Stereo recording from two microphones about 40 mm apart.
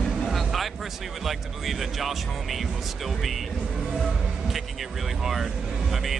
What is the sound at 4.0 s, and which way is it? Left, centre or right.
Speech, centre.